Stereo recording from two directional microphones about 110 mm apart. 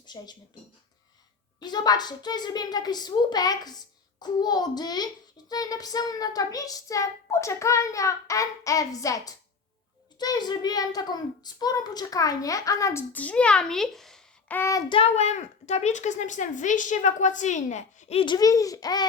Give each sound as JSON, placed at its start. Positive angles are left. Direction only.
{"t": 0.0, "sound": "speech", "side_deg": 40}
{"t": 1.5, "sound": "a child's voice", "side_deg": 40}
{"t": 14.4, "sound": "child singing", "side_deg": 15}
{"t": 14.8, "sound": "a child's voice", "side_deg": 55}
{"t": 15.1, "sound": "speech", "side_deg": 90}
{"t": 18.3, "sound": "a child's voice", "side_deg": 35}